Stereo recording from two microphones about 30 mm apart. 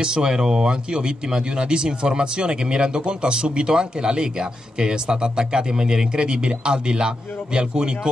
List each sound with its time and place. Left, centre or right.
0.0 s speech: right